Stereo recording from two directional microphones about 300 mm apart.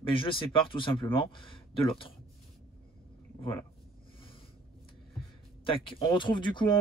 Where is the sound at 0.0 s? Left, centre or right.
Centre.